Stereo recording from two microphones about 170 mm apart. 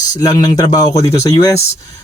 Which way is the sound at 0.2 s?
20° left (ahead or behind).